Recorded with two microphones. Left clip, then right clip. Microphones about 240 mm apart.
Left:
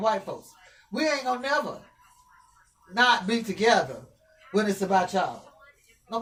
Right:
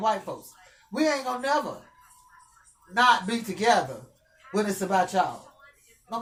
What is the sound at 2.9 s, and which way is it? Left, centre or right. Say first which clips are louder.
Speech: right 1 dB; right.